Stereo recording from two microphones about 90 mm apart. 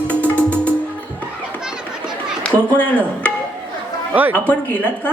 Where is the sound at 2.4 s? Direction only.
15° left (ahead or behind).